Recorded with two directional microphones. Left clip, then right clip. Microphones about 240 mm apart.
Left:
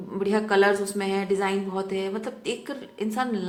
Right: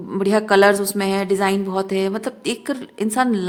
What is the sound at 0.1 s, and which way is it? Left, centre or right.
A woman's voice, right.